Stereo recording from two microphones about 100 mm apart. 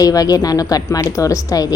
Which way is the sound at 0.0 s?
40° left (ahead or behind).